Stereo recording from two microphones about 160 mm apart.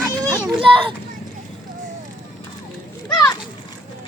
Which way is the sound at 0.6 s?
35° right (ahead or behind).